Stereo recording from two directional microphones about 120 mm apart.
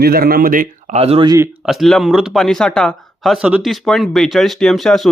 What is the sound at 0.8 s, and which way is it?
Speech, 60° right (ahead or behind).